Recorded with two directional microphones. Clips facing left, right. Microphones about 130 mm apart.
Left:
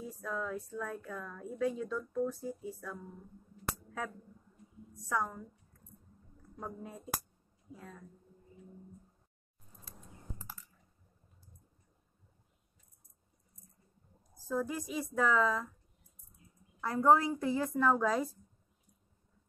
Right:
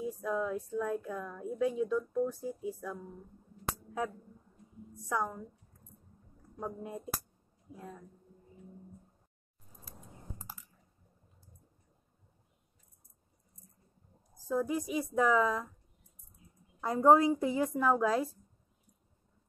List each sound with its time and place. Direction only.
0.0 s a woman's voice: 15° right (ahead or behind)
5.1 s a woman's voice: 10° right (ahead or behind)
6.6 s a woman's voice: 15° right (ahead or behind)
14.5 s a woman's voice: 10° right (ahead or behind)
16.8 s a woman's voice: 20° right (ahead or behind); by 18.4 s 5° right (ahead or behind)